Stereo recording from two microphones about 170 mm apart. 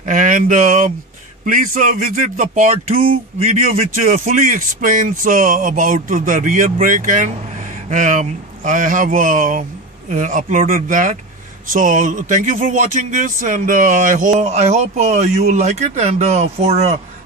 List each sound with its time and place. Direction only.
0.0 s speech: 50° right (ahead or behind)